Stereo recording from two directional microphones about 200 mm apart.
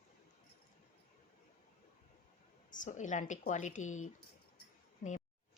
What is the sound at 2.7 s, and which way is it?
Speech, 40° left (ahead or behind).